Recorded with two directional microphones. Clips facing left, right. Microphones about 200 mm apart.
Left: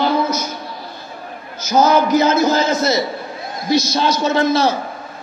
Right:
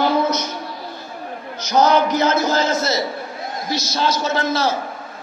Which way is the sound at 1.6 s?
5° left (ahead or behind).